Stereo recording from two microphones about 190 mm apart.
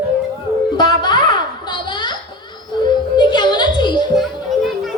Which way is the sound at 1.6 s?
25° left (ahead or behind).